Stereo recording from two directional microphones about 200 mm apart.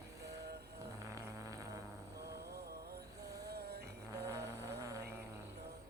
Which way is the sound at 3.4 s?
55° right (ahead or behind).